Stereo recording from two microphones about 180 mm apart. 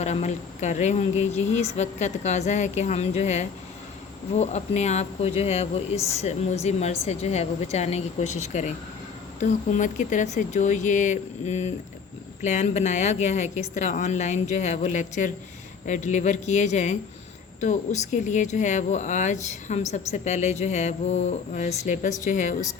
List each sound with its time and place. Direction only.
0.0 s speech: 40° left (ahead or behind)